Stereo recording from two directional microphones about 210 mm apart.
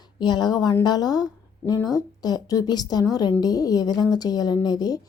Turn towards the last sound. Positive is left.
turn(degrees=20)  # may be behind; listen again after turning